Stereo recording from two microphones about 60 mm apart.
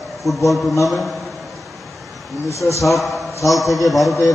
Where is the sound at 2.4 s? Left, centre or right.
Left.